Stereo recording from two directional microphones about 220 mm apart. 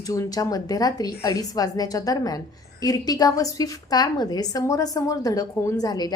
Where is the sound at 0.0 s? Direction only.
15° left (ahead or behind).